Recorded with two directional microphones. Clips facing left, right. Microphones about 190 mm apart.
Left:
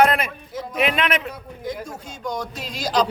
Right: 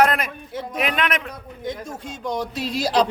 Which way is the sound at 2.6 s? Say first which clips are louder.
Right 2 dB; 30° right (ahead or behind).